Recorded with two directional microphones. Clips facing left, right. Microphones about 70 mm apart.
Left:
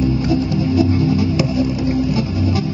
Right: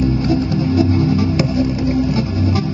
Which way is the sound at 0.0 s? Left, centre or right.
Right.